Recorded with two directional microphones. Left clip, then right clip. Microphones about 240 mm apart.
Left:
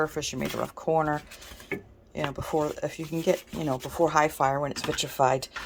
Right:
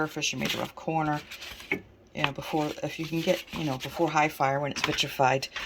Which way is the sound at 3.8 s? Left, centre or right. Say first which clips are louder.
Left 2 dB; centre.